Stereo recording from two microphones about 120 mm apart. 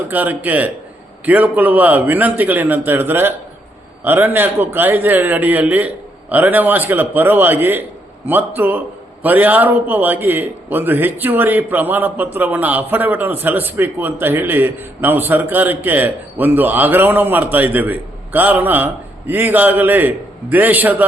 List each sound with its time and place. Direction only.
0.1 s a man's voice: 15° right (ahead or behind)